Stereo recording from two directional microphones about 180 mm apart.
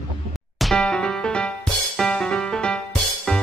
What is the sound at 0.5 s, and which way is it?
Music, centre (ahead or behind).